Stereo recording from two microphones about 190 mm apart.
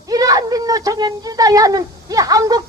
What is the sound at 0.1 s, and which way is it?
Speech, 20° right (ahead or behind).